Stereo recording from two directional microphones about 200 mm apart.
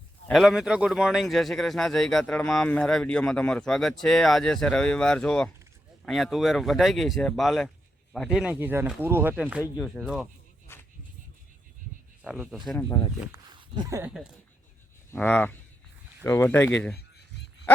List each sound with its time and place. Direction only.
0.3 s speech: centre (ahead or behind)
10.7 s a sound: 10° left (ahead or behind)
12.2 s speech: 5° right (ahead or behind)
13.3 s speech: 20° right (ahead or behind)
15.1 s speech: 10° left (ahead or behind)